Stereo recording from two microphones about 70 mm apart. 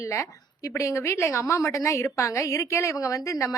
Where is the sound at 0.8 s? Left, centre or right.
Left.